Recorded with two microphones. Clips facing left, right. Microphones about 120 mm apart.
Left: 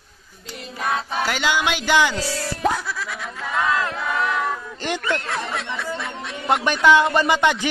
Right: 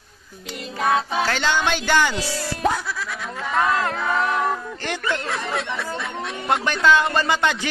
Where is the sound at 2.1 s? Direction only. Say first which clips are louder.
Left 1 dB; centre (ahead or behind).